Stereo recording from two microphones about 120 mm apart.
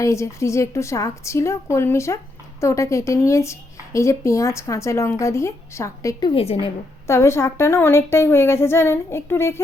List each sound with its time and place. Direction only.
0.0 s speech: 25° left (ahead or behind)
6.3 s a woman's voice: 55° left (ahead or behind)
7.1 s speech: 20° left (ahead or behind)